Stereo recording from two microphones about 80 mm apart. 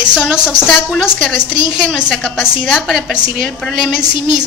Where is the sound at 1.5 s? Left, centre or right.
Left.